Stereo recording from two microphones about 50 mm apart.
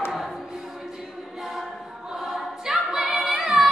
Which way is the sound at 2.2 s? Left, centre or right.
Centre.